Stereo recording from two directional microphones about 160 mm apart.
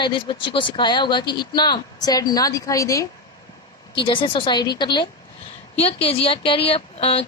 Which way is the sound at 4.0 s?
30° left (ahead or behind).